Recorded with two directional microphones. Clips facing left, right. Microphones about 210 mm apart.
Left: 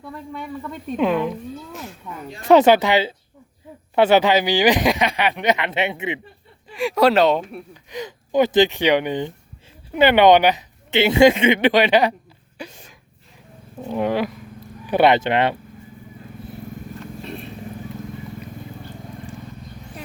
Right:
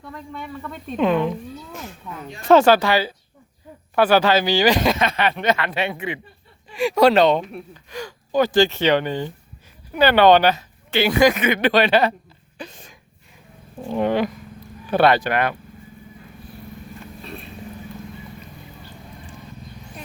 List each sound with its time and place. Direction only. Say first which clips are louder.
0.0 s speech: left 2 dB; 10° left (ahead or behind)
2.5 s speech: left 1 dB; 20° left (ahead or behind)
6.7 s speech: right 1 dB; centre (ahead or behind)
12.5 s a sound: left 1 dB; 10° left (ahead or behind)
13.9 s speech: right 1 dB; 5° left (ahead or behind)
14.8 s speech: left 1 dB; 15° left (ahead or behind)